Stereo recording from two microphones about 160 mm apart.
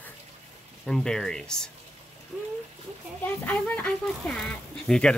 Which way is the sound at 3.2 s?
10° left (ahead or behind).